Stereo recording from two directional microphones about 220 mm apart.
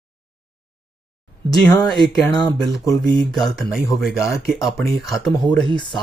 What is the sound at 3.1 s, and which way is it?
Speech, centre (ahead or behind).